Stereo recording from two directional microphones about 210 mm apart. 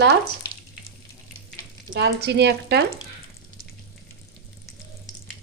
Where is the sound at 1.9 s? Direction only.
55° right (ahead or behind).